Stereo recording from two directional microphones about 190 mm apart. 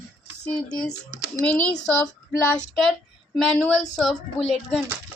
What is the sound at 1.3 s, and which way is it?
Speech, 5° left (ahead or behind).